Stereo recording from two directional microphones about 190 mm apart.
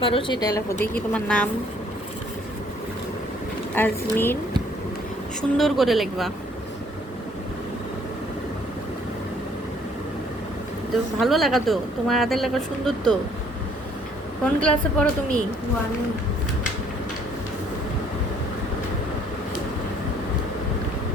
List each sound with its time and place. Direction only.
0.0 s a woman's voice: 25° left (ahead or behind); by 1.5 s 5° left (ahead or behind)
3.8 s speech: 10° left (ahead or behind)
5.4 s speech: centre (ahead or behind)
11.2 s speech: centre (ahead or behind)
14.4 s speech: 5° left (ahead or behind)